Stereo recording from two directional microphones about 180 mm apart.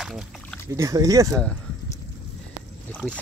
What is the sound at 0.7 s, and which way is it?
Speech, 20° right (ahead or behind).